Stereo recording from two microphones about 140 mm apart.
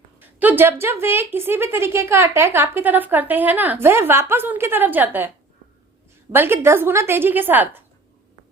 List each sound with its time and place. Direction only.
0.2 s a woman's voice: 15° right (ahead or behind)
6.3 s a woman's voice: 15° right (ahead or behind)